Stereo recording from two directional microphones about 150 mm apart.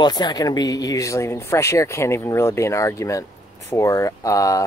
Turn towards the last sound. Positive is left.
turn(degrees=20)  # may be behind; listen again after turning